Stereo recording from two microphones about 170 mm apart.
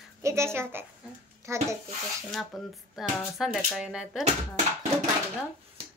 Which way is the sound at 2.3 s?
Centre (ahead or behind).